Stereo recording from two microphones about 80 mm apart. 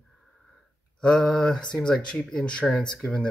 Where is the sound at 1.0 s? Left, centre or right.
Centre.